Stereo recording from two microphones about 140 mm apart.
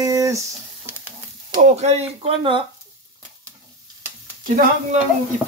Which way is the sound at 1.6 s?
50° right (ahead or behind).